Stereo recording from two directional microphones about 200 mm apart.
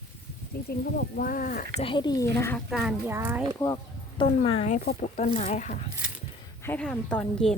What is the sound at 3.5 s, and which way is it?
Speech, 20° left (ahead or behind).